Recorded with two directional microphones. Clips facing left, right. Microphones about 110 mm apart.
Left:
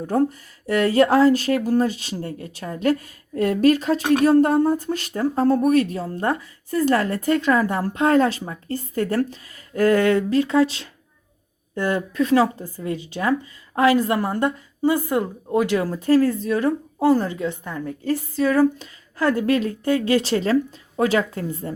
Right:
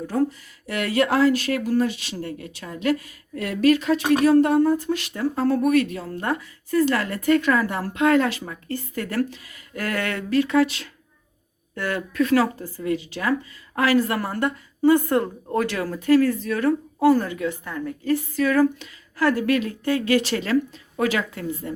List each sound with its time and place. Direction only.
0.1 s a woman's voice: 40° left (ahead or behind); by 16.0 s 20° left (ahead or behind)
16.0 s a woman's voice: 35° left (ahead or behind)
17.8 s a woman's voice: 30° left (ahead or behind)